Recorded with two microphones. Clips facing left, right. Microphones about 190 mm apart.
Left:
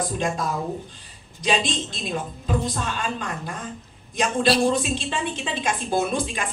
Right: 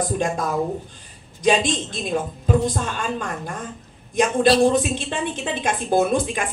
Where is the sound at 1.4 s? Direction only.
50° right (ahead or behind).